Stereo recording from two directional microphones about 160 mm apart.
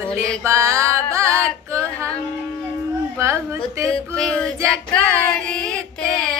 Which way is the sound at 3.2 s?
15° right (ahead or behind).